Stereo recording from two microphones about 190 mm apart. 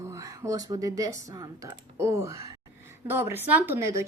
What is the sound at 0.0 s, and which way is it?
Speech, 15° right (ahead or behind).